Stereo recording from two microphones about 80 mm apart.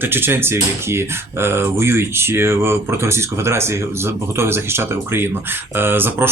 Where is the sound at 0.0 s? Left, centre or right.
Right.